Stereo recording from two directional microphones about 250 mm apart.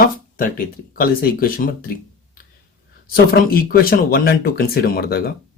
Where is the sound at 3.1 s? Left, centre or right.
Left.